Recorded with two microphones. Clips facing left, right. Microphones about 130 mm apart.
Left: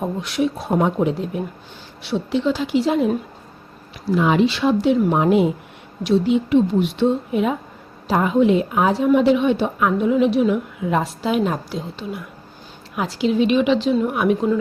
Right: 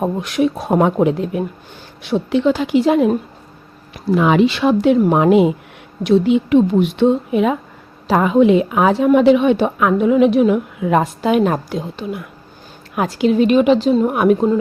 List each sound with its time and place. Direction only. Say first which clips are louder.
0.0 s a woman's voice: right 4 dB; 55° right (ahead or behind)
4.1 s a woman's voice: right 4 dB; 70° right (ahead or behind)
6.0 s a woman's voice: right 4 dB; 65° right (ahead or behind); by 14.5 s 50° right (ahead or behind)